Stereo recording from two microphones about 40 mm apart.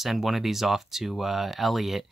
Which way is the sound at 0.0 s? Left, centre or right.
Centre.